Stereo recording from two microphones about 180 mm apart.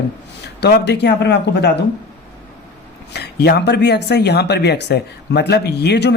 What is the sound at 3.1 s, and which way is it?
Speech, 65° left (ahead or behind).